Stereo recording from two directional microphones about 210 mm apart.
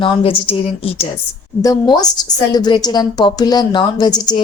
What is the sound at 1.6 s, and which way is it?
A woman's voice, 15° left (ahead or behind).